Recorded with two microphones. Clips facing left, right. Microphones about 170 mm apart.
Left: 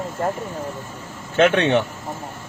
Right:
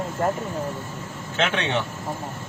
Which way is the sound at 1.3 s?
50° left (ahead or behind).